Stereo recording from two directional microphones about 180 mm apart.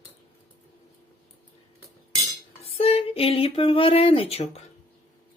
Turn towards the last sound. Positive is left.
turn(degrees=35)  # may be behind; listen again after turning